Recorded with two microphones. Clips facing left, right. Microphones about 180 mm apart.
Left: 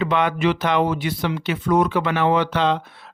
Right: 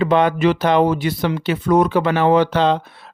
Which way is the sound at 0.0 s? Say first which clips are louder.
Right 5 dB; 35° right (ahead or behind).